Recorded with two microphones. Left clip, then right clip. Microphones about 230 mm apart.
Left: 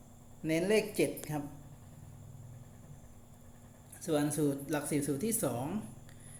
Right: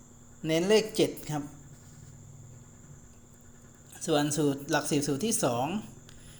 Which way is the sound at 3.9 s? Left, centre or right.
Right.